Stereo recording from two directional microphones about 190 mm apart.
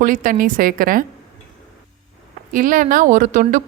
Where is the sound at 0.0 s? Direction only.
45° right (ahead or behind).